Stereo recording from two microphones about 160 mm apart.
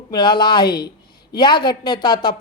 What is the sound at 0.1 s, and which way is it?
Speech, 30° left (ahead or behind).